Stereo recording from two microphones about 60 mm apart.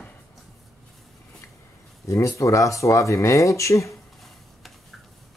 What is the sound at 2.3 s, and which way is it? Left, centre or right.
Speech, left.